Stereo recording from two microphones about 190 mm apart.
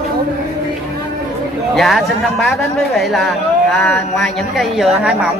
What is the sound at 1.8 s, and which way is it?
A man's voice, centre (ahead or behind).